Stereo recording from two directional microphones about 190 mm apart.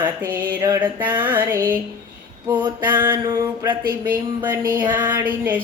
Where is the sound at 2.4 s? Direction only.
25° right (ahead or behind).